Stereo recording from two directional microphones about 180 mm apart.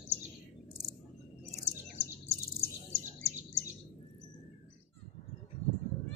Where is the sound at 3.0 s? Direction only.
40° right (ahead or behind).